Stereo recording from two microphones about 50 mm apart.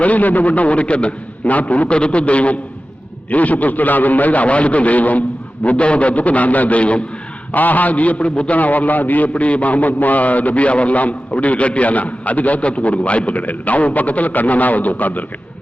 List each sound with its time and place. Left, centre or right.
0.0 s a man's voice: left